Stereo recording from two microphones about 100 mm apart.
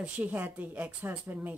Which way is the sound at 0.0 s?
15° right (ahead or behind).